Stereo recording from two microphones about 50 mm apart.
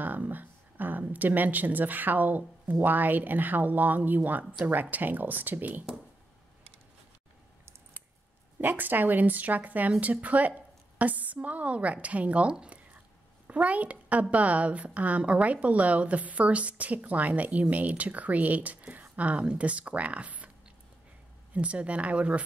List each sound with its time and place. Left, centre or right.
0.0 s a sound: right
1.1 s speech: right
8.5 s a woman's voice: right
12.5 s a sound: right
13.5 s a child's voice: right
21.5 s a woman's voice: right